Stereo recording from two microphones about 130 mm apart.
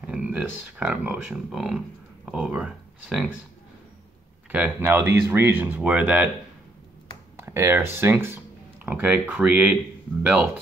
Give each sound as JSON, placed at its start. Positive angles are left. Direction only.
{"t": 0.0, "sound": "speech", "side_deg": -10}
{"t": 4.5, "sound": "speech", "side_deg": -10}
{"t": 7.3, "sound": "speech", "side_deg": -20}